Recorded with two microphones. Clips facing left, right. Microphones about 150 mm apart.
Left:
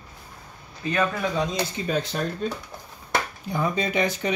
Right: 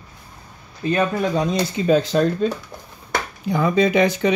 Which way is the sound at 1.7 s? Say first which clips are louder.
Right 9 dB; 90° right.